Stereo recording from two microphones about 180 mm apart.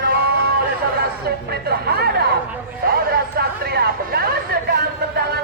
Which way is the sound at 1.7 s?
60° right (ahead or behind).